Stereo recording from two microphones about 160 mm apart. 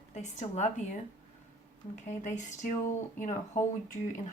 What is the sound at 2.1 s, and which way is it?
Speech, 50° left (ahead or behind).